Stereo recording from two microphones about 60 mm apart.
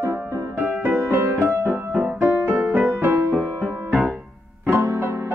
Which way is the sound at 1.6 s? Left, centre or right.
Right.